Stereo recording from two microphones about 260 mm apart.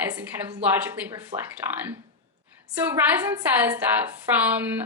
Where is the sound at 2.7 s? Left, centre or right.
Centre.